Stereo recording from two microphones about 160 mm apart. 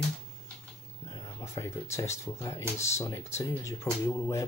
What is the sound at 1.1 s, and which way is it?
Speech, 20° left (ahead or behind).